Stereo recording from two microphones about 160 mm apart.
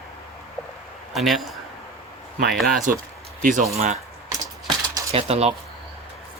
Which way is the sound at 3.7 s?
45° right (ahead or behind).